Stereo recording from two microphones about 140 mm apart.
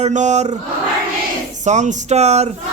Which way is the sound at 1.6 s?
55° right (ahead or behind).